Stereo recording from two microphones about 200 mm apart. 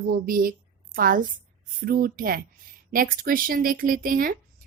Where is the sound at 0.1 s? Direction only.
45° right (ahead or behind).